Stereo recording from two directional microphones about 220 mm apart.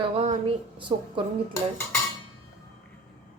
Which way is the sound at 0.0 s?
25° right (ahead or behind).